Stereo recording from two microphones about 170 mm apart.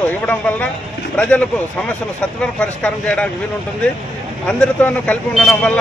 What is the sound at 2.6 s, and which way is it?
Speech, 5° left (ahead or behind).